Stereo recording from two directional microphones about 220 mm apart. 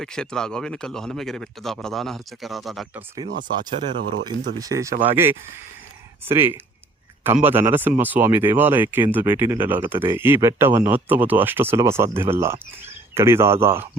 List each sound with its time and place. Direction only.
0.0 s speech: 5° left (ahead or behind)
3.5 s speech: 20° right (ahead or behind)